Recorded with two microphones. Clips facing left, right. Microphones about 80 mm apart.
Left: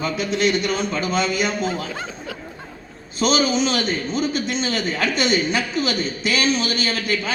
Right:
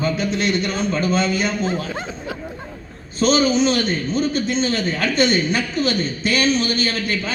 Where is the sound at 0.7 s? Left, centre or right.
Centre.